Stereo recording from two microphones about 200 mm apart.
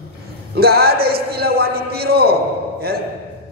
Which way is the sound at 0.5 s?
50° right (ahead or behind).